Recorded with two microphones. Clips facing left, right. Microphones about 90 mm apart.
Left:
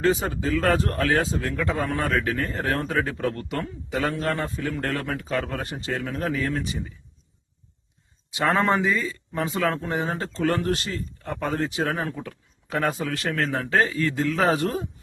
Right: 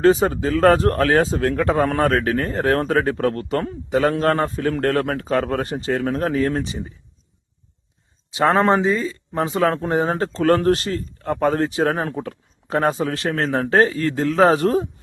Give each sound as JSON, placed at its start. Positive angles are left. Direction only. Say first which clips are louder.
{"t": 0.0, "sound": "speech", "louder": "right 7 dB", "side_deg": -40}
{"t": 8.4, "sound": "speech", "louder": "right 5 dB", "side_deg": -35}